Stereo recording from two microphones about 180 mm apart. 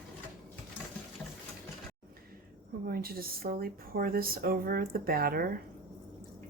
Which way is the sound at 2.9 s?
55° right (ahead or behind).